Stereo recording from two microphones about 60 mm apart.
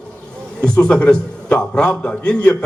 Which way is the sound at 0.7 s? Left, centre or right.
Left.